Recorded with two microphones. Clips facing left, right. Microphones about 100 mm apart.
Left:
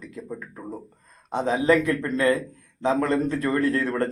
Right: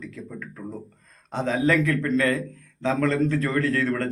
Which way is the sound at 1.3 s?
20° left (ahead or behind).